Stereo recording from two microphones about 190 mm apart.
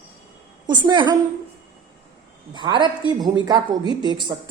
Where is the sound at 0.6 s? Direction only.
25° right (ahead or behind).